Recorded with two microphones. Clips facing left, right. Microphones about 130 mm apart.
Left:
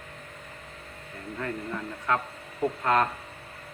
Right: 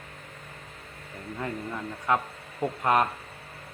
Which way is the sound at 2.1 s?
20° right (ahead or behind).